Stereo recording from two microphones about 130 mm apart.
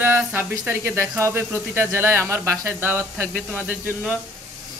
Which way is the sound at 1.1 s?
20° right (ahead or behind).